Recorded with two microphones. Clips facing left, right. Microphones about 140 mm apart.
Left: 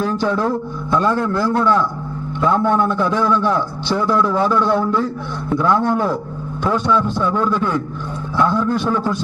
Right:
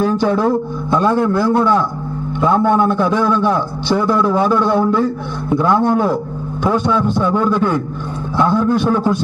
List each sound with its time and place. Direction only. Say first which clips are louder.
0.0 s a sound: right 4 dB; 15° right (ahead or behind)
0.3 s a man's voice: right 4 dB; 10° right (ahead or behind)
8.4 s a man's voice: right 2 dB; 20° right (ahead or behind)